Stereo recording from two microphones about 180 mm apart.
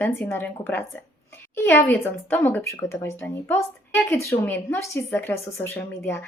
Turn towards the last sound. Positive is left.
turn(degrees=10)  # may be behind; listen again after turning